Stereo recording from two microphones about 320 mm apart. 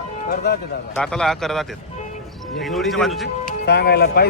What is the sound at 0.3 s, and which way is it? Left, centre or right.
Speech, left.